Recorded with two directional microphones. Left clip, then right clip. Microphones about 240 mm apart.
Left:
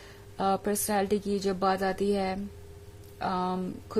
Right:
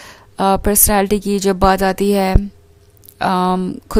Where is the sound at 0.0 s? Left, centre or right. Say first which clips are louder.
Right 13 dB; right.